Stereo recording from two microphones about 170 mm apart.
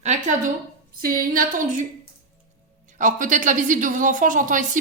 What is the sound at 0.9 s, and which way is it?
Speech, 55° right (ahead or behind).